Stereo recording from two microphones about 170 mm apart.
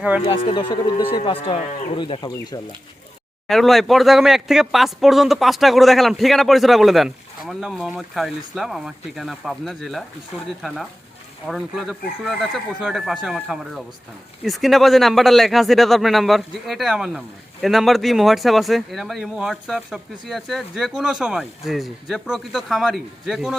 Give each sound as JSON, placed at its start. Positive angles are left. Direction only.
{"t": 0.5, "sound": "speech", "side_deg": 30}
{"t": 3.4, "sound": "speech", "side_deg": 0}
{"t": 11.4, "sound": "speech", "side_deg": 0}